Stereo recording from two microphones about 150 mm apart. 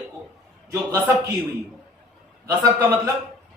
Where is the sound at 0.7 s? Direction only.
20° right (ahead or behind).